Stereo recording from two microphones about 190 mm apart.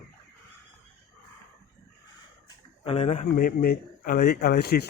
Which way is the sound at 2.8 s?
30° left (ahead or behind).